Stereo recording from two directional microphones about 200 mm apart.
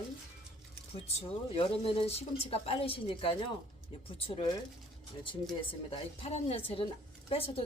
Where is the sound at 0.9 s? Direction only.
30° left (ahead or behind).